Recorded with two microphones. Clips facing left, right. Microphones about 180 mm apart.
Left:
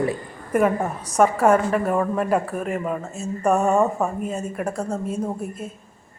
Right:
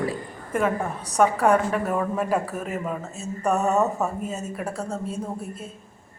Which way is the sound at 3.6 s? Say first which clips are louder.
Left 2 dB; 15° left (ahead or behind).